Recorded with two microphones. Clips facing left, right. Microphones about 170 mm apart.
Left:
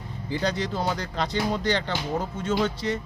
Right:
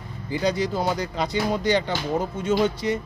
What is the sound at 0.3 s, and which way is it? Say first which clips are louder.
Speech: right 3 dB; 10° right (ahead or behind).